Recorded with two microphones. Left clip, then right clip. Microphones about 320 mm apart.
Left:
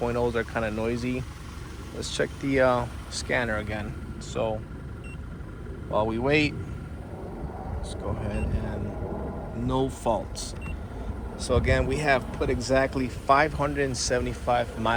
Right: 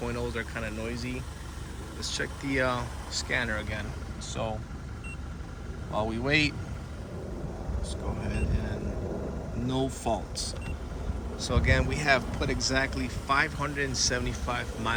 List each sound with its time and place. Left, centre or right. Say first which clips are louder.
0.0 s speech: left 7 dB; centre
2.0 s speech: left 5 dB; centre
5.9 s speech: left 4 dB; centre
7.9 s speech: left 3 dB; centre